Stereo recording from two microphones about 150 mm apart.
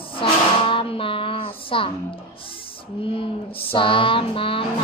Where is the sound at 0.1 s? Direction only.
35° left (ahead or behind).